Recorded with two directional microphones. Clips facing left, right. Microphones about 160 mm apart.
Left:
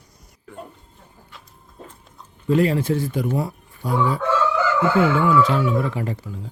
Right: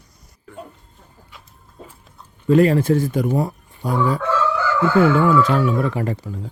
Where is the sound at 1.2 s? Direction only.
5° right (ahead or behind).